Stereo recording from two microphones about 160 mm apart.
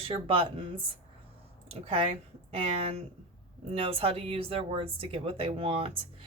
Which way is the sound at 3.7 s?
35° right (ahead or behind).